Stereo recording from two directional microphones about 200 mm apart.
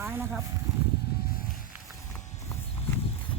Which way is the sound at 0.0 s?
10° right (ahead or behind).